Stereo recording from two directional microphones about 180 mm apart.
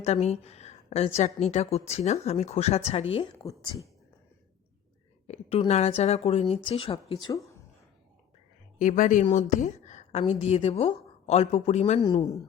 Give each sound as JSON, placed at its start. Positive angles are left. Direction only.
{"t": 0.0, "sound": "a woman's voice", "side_deg": 35}
{"t": 5.2, "sound": "a woman's voice", "side_deg": 35}
{"t": 8.8, "sound": "a woman's voice", "side_deg": 45}
{"t": 12.0, "sound": "a woman's voice", "side_deg": 25}